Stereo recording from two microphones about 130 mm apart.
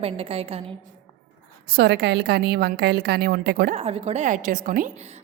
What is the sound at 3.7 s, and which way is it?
A woman's voice, 50° right (ahead or behind).